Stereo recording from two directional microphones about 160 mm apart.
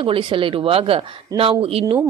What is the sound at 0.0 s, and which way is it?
Speech, 35° right (ahead or behind).